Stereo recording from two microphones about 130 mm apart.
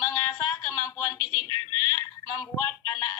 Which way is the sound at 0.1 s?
30° left (ahead or behind).